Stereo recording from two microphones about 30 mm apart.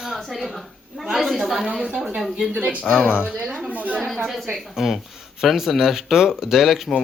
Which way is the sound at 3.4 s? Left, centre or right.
Centre.